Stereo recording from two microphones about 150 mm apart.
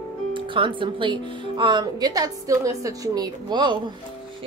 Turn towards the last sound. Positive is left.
turn(degrees=-30)  # may be behind; listen again after turning